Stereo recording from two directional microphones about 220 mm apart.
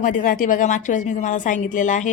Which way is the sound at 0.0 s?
40° left (ahead or behind).